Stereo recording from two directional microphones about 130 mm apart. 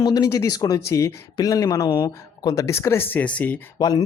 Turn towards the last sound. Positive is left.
turn(degrees=30)  # may be behind; listen again after turning